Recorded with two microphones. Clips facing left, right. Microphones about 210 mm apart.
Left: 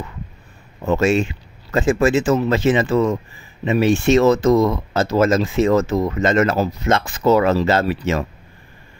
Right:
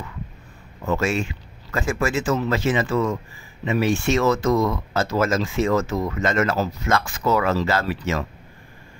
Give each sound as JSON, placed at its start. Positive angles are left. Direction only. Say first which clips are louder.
{"t": 0.8, "sound": "speech", "louder": "left 6 dB", "side_deg": 25}